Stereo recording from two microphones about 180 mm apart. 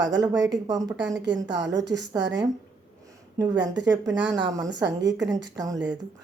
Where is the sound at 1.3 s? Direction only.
80° right.